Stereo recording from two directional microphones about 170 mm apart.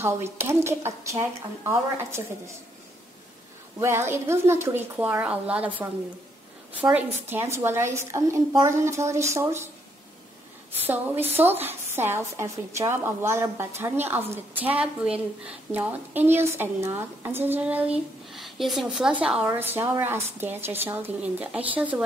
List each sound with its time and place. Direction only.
0.0 s a woman's voice: 15° right (ahead or behind)
3.8 s a woman's voice: 15° right (ahead or behind)
11.3 s a woman's voice: 10° right (ahead or behind)